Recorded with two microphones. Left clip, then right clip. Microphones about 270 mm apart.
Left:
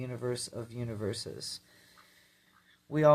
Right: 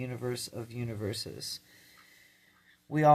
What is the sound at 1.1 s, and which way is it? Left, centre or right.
Speech, right.